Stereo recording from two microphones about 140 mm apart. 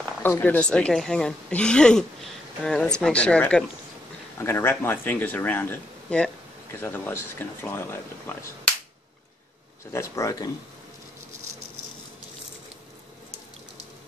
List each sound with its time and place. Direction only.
0.0 s speech: 15° left (ahead or behind)
9.9 s speech: 20° left (ahead or behind)